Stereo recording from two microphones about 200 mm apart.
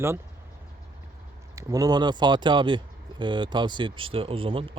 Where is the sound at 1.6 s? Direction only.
20° right (ahead or behind).